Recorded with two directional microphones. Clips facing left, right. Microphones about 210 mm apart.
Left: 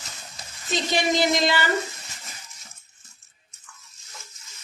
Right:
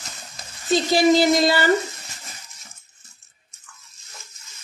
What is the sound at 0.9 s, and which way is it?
Speech, 35° right (ahead or behind).